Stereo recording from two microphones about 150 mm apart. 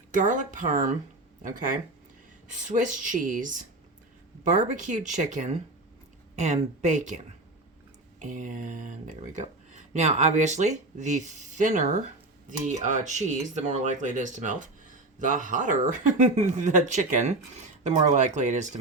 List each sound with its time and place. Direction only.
0.1 s speech: 60° right (ahead or behind)
8.2 s speech: 55° right (ahead or behind)